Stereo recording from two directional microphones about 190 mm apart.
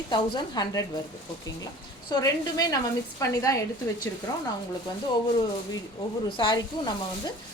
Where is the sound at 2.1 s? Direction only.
20° left (ahead or behind).